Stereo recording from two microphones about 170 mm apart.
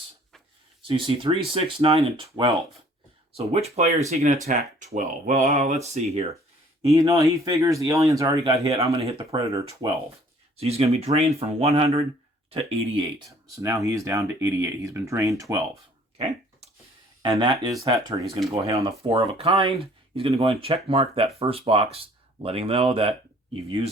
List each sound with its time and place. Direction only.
0.8 s speech: 30° right (ahead or behind)
3.3 s speech: 40° right (ahead or behind)
6.8 s speech: 20° right (ahead or behind)
10.6 s speech: 35° right (ahead or behind)
13.6 s speech: 20° right (ahead or behind)
16.1 s a sound: 40° right (ahead or behind)
17.2 s speech: 25° right (ahead or behind)
18.9 s speech: 30° right (ahead or behind)